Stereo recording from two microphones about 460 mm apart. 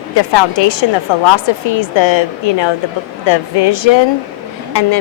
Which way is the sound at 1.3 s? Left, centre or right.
Left.